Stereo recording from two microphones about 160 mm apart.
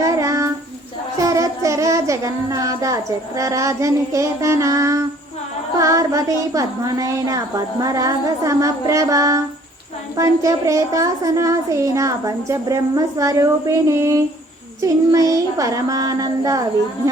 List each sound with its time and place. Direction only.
0.0 s child singing: 20° right (ahead or behind)
5.7 s a child's voice: 20° right (ahead or behind)